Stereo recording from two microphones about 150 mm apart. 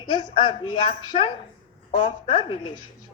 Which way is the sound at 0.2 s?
30° left (ahead or behind).